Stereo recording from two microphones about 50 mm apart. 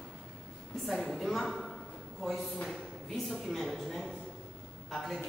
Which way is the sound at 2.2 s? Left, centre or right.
Centre.